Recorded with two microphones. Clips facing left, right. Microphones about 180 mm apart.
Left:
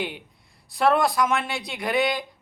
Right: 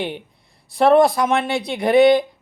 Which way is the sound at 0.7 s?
25° right (ahead or behind).